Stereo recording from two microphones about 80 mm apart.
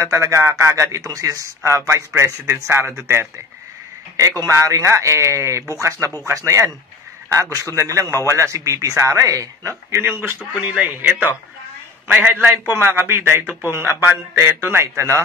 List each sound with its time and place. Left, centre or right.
0.0 s a man's voice: right
10.5 s a man's voice: centre; by 15.2 s right